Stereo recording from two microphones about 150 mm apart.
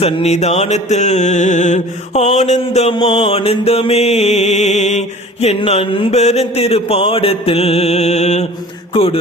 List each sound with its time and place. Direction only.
0.0 s mantra: 45° left (ahead or behind)
2.9 s mantra: 35° left (ahead or behind)